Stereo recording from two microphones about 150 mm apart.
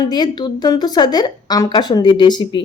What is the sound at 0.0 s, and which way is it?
Speech, 25° left (ahead or behind).